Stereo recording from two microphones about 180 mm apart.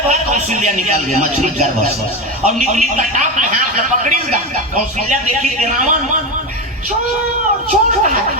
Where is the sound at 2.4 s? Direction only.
45° right (ahead or behind).